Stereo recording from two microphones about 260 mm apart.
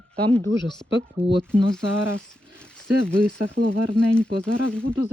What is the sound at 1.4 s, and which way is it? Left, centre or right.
Speech, centre.